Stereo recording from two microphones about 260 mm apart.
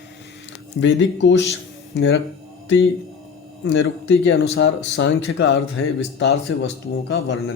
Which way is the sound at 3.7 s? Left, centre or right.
Left.